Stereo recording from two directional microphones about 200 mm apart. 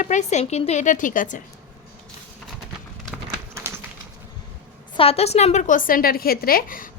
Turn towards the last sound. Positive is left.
turn(degrees=45)  # may be behind; listen again after turning